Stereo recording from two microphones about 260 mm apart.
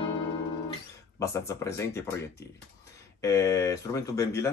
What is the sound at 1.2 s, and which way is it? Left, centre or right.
Speech, centre.